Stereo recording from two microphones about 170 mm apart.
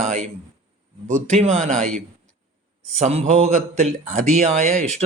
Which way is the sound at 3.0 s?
45° right (ahead or behind).